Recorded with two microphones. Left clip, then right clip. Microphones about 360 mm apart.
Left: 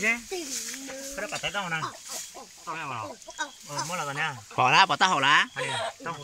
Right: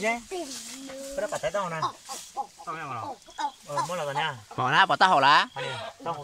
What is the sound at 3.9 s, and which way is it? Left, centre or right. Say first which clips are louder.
Speech: right 1 dB; right.